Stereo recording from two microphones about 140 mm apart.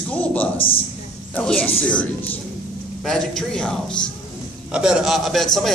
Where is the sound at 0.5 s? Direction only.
40° left (ahead or behind).